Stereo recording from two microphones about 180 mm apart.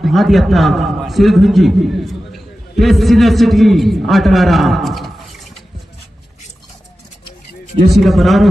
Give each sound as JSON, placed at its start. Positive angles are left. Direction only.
{"t": 0.0, "sound": "a man's voice", "side_deg": 0}
{"t": 7.9, "sound": "a man's voice", "side_deg": 0}